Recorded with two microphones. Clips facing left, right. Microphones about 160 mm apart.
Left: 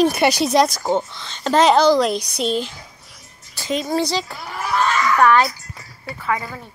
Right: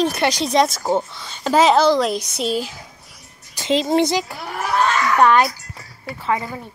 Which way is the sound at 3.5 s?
20° right (ahead or behind).